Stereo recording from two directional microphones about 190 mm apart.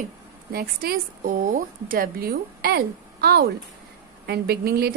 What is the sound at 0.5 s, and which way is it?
A woman's voice, 50° right (ahead or behind).